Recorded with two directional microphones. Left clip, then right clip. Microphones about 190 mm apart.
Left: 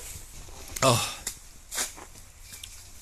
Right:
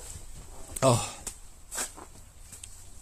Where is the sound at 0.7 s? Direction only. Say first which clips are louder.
Left 1 dB; 15° right (ahead or behind).